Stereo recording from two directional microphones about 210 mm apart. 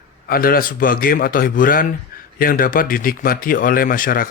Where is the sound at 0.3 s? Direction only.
45° left (ahead or behind).